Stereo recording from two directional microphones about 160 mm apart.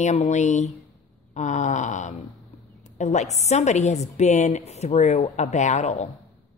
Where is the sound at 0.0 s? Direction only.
45° left (ahead or behind).